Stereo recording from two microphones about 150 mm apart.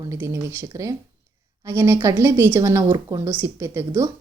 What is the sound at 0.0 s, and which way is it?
Speech, 20° right (ahead or behind).